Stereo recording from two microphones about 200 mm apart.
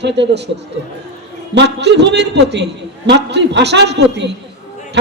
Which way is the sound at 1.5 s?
60° right (ahead or behind).